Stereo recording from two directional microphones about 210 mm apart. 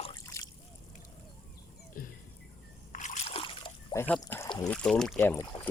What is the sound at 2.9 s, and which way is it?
Trickle, 35° left (ahead or behind).